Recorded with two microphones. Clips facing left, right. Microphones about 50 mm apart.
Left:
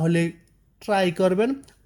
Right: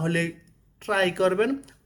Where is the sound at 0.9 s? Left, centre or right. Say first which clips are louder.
Left 2 dB; right.